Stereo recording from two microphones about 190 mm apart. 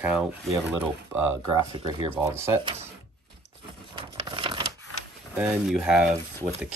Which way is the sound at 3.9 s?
25° right (ahead or behind).